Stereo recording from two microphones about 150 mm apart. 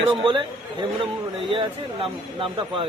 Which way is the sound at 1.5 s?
35° right (ahead or behind).